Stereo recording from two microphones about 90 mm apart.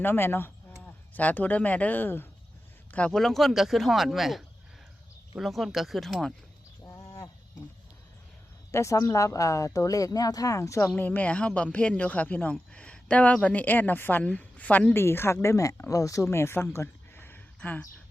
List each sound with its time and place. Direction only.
0.0 s speech: 25° left (ahead or behind)
3.1 s speech: 5° left (ahead or behind)
6.8 s a sound: 40° left (ahead or behind)
8.7 s a woman's voice: 35° left (ahead or behind)
11.0 s speech: 20° left (ahead or behind)